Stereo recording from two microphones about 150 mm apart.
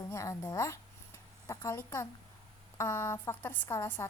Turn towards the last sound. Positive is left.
turn(degrees=15)  # may be behind; listen again after turning